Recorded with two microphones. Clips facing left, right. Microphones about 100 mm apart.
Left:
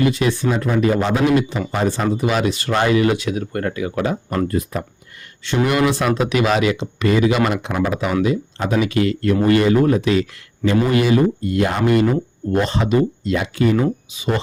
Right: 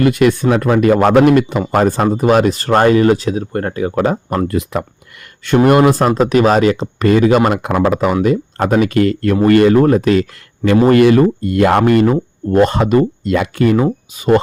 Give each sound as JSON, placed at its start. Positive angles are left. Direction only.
{"t": 0.0, "sound": "speech", "side_deg": -55}
{"t": 4.4, "sound": "speech", "side_deg": -85}
{"t": 5.6, "sound": "speech", "side_deg": -45}
{"t": 12.1, "sound": "speech", "side_deg": -45}
{"t": 14.2, "sound": "speech", "side_deg": -50}